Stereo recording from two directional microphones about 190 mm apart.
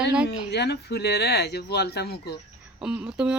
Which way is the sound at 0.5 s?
60° left (ahead or behind).